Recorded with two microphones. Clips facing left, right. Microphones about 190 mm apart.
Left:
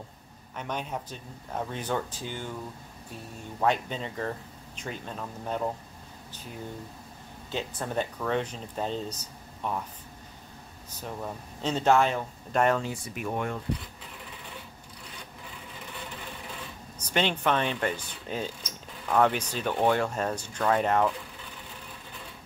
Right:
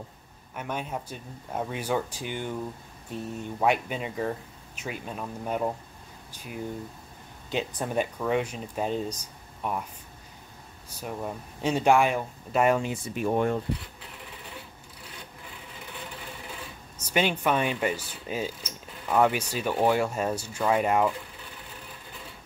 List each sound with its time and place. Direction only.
0.6 s mechanisms: 5° right (ahead or behind)
3.1 s speech: 20° right (ahead or behind)
3.5 s mechanisms: 10° right (ahead or behind)
7.5 s mechanisms: 15° right (ahead or behind)
10.9 s mechanisms: 10° right (ahead or behind); by 13.6 s 35° right (ahead or behind)
17.0 s mechanisms: 10° right (ahead or behind)